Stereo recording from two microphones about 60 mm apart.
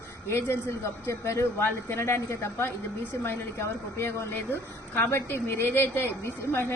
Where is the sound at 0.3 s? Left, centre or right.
Left.